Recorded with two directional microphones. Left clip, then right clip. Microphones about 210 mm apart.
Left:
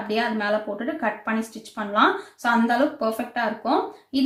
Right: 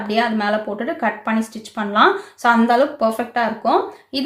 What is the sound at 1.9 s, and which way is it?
Speech, 40° right (ahead or behind).